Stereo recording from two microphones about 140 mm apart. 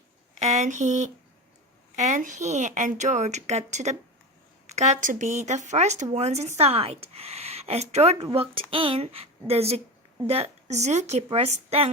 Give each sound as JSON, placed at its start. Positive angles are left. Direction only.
{"t": 0.3, "sound": "a woman's voice", "side_deg": -55}